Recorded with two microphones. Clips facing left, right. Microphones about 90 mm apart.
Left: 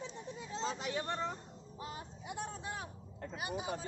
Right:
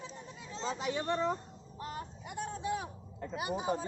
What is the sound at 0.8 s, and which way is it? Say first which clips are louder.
Speech: right 5 dB; centre (ahead or behind).